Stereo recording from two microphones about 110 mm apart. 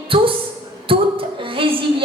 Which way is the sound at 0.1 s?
55° right (ahead or behind).